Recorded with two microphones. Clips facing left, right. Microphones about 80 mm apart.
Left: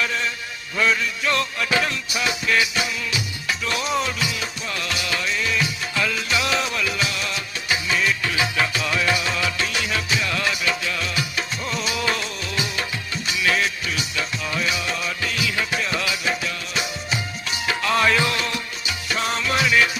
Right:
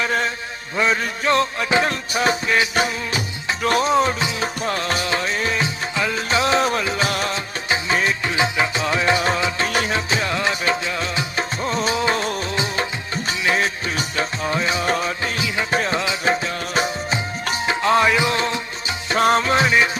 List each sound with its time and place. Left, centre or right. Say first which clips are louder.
0.0 s a sound: right 4 dB; right
1.0 s music: right 4 dB; right
7.7 s music: right 2 dB; right
17.7 s music: right 3 dB; right
19.2 s music: right 7 dB; right